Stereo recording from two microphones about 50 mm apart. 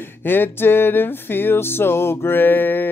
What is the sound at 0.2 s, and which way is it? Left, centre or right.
Music, left.